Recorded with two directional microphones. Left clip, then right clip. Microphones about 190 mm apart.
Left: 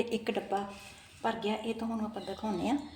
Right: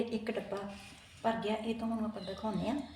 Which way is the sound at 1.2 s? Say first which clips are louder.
Left 1 dB; 35° left (ahead or behind).